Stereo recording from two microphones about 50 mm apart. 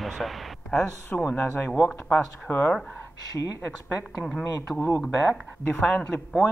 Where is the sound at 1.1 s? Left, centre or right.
Left.